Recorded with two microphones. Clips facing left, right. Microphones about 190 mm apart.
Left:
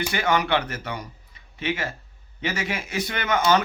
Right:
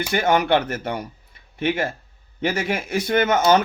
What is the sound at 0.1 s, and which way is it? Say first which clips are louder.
A man's voice: right 6 dB; 50° right (ahead or behind).